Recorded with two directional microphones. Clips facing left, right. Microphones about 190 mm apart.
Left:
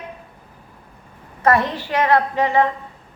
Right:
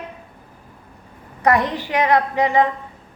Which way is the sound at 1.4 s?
15° right (ahead or behind).